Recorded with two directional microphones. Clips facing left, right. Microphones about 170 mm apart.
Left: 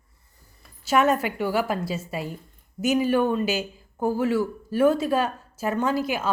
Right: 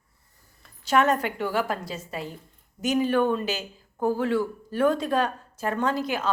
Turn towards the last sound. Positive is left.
turn(degrees=5)  # may be behind; listen again after turning